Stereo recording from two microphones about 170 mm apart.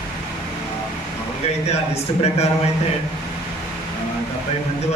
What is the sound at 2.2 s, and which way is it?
Speech, 40° left (ahead or behind).